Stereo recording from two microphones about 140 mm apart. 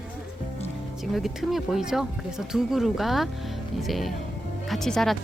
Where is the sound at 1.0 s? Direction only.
Centre (ahead or behind).